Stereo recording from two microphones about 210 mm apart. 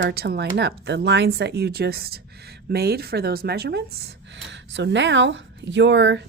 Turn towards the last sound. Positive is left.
turn(degrees=-60)  # may be behind; listen again after turning